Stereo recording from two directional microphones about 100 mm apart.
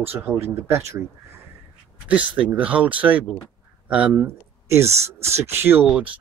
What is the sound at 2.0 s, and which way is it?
Speech, 15° right (ahead or behind).